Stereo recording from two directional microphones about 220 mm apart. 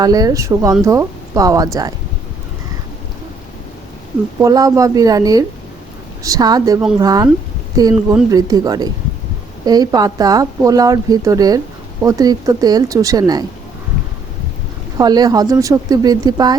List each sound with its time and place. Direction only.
0.0 s speech: 15° right (ahead or behind)
4.4 s speech: 15° right (ahead or behind)
14.9 s speech: 20° right (ahead or behind)